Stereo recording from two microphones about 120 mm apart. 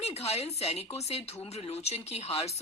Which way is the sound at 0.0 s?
60° left (ahead or behind).